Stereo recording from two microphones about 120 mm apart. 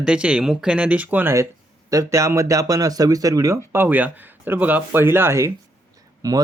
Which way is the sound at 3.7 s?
15° right (ahead or behind).